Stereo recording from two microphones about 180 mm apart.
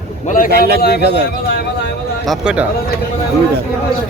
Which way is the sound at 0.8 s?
65° left (ahead or behind).